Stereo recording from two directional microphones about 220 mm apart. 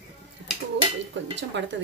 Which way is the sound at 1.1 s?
55° right (ahead or behind).